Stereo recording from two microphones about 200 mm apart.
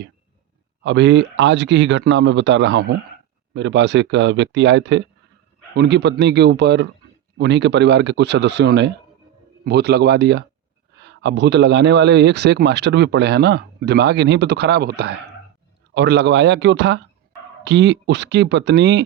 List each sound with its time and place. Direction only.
0.8 s a man's voice: 60° right (ahead or behind)